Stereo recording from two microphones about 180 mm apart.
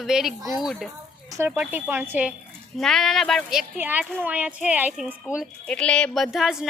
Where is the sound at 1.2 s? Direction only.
15° right (ahead or behind).